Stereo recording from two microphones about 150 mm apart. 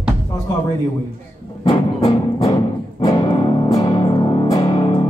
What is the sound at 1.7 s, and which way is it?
Music, 25° left (ahead or behind).